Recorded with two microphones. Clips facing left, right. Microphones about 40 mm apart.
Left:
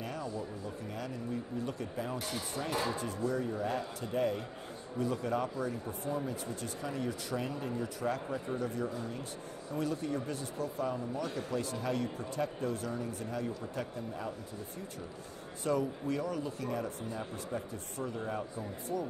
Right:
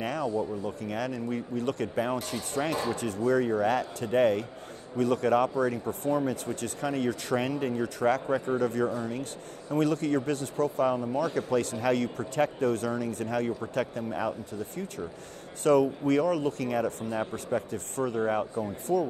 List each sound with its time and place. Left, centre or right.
0.0 s a sound: right
0.4 s speech: right
2.6 s speech: right
2.9 s speech: right
17.2 s speech: right
17.6 s speech: right